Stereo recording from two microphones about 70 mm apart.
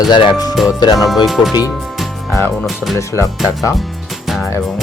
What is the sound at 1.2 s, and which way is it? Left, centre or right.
Speech, centre.